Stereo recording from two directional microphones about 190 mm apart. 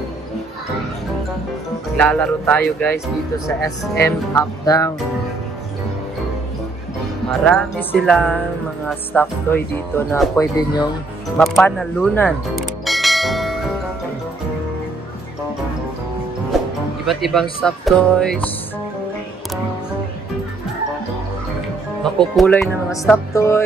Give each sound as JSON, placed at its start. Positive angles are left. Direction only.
{"t": 2.0, "sound": "speech", "side_deg": 10}
{"t": 7.2, "sound": "speech", "side_deg": 5}
{"t": 11.3, "sound": "speech", "side_deg": 0}
{"t": 11.6, "sound": "bell", "side_deg": 5}
{"t": 17.0, "sound": "speech", "side_deg": 0}
{"t": 22.0, "sound": "speech", "side_deg": 0}
{"t": 23.0, "sound": "speech", "side_deg": 15}